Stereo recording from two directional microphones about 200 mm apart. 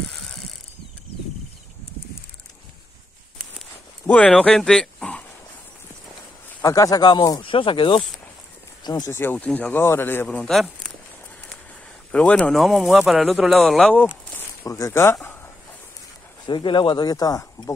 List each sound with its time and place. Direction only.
4.0 s speech: 5° left (ahead or behind)
6.6 s a man's voice: 15° left (ahead or behind)
12.1 s speech: 5° left (ahead or behind)
14.6 s speech: 15° left (ahead or behind)
16.4 s speech: 25° left (ahead or behind)